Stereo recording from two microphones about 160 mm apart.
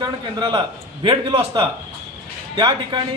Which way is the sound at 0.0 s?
30° right (ahead or behind).